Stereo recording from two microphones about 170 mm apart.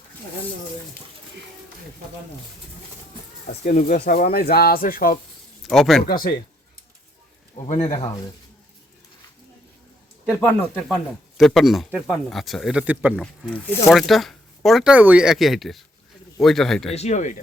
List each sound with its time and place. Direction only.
3.4 s speech: 50° left (ahead or behind)
5.6 s speech: centre (ahead or behind)
6.0 s speech: 60° left (ahead or behind)
7.6 s speech: 45° left (ahead or behind)
10.4 s speech: 5° left (ahead or behind)
13.4 s speech: centre (ahead or behind)
16.9 s speech: 40° left (ahead or behind)